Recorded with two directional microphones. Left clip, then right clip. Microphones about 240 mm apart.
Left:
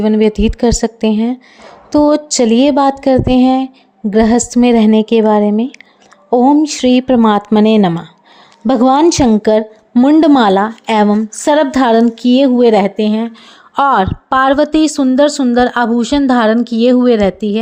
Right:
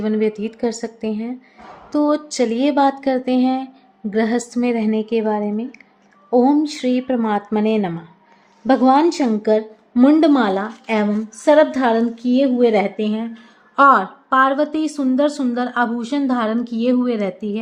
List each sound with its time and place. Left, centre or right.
0.0 s speech: left